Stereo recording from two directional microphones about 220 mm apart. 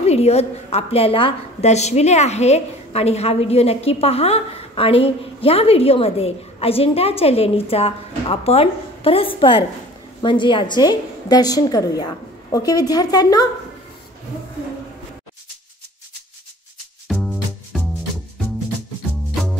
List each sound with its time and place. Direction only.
0.0 s a woman's voice: 30° left (ahead or behind)
17.1 s music: centre (ahead or behind)